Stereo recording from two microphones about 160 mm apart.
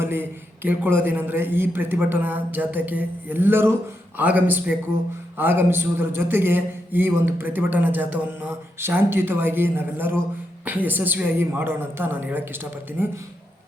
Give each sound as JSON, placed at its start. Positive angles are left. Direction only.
{"t": 0.0, "sound": "a man's voice", "side_deg": -15}